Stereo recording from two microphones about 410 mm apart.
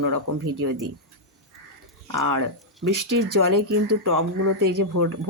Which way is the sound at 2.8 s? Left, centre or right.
Right.